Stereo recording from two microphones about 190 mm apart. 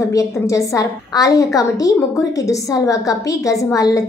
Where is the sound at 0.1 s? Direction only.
15° left (ahead or behind).